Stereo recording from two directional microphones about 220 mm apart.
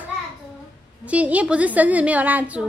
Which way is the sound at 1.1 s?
5° right (ahead or behind).